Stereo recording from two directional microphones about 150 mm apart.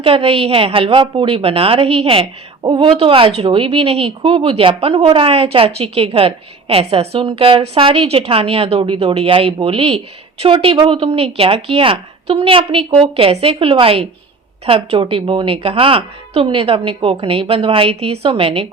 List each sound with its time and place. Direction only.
0.0 s speech: 40° right (ahead or behind)